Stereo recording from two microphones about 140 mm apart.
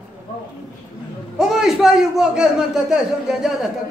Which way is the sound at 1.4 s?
5° right (ahead or behind).